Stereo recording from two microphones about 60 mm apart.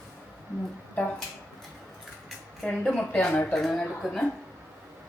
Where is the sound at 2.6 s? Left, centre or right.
Centre.